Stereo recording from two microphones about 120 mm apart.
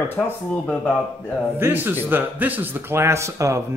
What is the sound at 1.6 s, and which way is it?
A man's voice, 15° right (ahead or behind).